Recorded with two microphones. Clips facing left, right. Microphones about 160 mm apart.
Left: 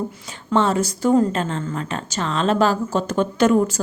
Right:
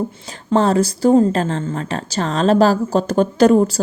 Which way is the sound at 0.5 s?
35° right (ahead or behind).